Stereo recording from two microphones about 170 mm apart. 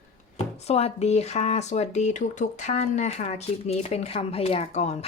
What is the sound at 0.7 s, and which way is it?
Speech, 35° left (ahead or behind).